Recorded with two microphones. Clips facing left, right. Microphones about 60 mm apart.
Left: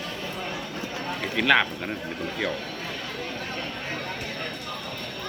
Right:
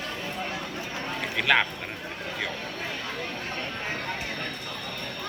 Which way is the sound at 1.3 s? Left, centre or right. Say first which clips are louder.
Left 2 dB; centre.